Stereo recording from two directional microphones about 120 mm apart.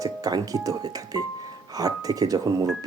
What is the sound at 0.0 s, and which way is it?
Speech, 30° right (ahead or behind).